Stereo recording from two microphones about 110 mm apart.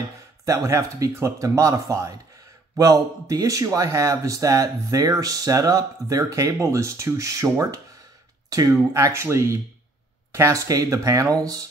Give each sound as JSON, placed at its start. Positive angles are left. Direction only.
{"t": 0.5, "sound": "speech", "side_deg": -30}